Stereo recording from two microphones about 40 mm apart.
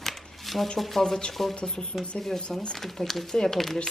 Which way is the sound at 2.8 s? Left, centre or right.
Centre.